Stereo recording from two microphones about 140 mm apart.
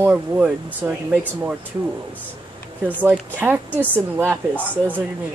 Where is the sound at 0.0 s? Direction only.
10° right (ahead or behind).